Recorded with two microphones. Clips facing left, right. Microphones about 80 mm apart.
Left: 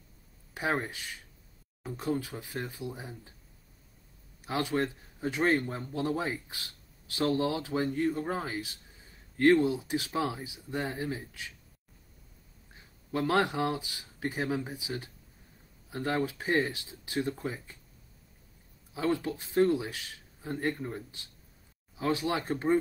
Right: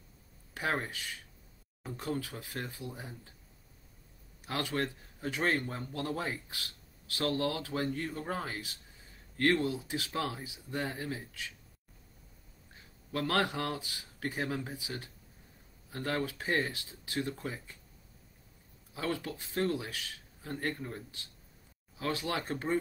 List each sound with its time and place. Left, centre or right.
0.6 s speech: centre
4.5 s speech: centre
6.5 s speech: left
9.4 s speech: centre
13.1 s speech: centre
18.9 s speech: left